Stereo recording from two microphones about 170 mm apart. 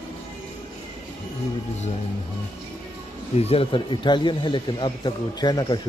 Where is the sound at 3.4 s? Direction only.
35° left (ahead or behind).